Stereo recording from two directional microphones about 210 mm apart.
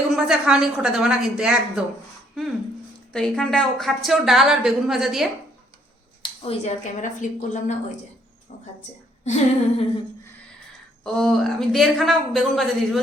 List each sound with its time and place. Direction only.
0.3 s a woman's voice: 5° right (ahead or behind)
6.5 s a woman's voice: 35° left (ahead or behind)
9.2 s a woman's voice: 30° left (ahead or behind)
11.0 s a woman's voice: centre (ahead or behind)